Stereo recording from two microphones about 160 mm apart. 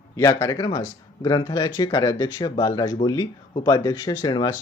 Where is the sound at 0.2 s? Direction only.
20° left (ahead or behind).